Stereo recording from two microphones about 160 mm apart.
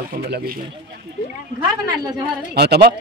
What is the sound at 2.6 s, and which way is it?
Speech, 90° right.